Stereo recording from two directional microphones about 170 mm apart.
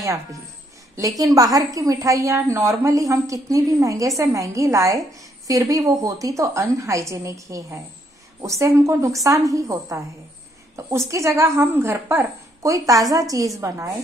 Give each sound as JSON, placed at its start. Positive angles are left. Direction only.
{"t": 0.9, "sound": "a woman's voice", "side_deg": -20}